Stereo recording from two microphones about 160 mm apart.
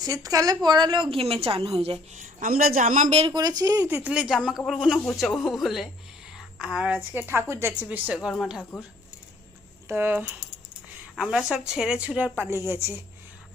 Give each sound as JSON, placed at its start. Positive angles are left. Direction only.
{"t": 0.0, "sound": "a woman's voice", "side_deg": -20}
{"t": 1.1, "sound": "a woman's voice", "side_deg": -40}
{"t": 3.3, "sound": "a woman's voice", "side_deg": -25}
{"t": 9.9, "sound": "a woman's voice", "side_deg": -15}
{"t": 11.2, "sound": "a woman's voice", "side_deg": -5}